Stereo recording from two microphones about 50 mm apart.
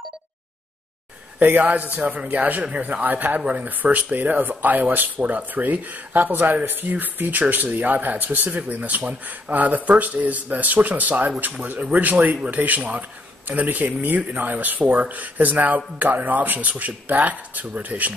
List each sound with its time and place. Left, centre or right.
1.4 s a man's voice: right
3.0 s speech: right